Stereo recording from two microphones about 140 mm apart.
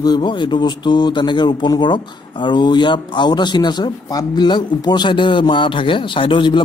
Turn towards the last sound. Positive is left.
turn(degrees=35)  # may be behind; listen again after turning